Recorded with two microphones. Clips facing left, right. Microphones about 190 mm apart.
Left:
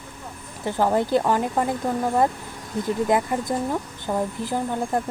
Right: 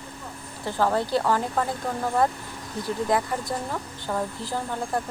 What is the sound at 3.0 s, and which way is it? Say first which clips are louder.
Speech: left 2 dB; 20° left (ahead or behind).